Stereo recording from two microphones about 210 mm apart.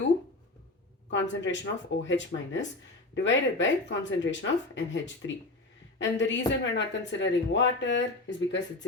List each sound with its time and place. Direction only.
1.1 s speech: 60° left (ahead or behind)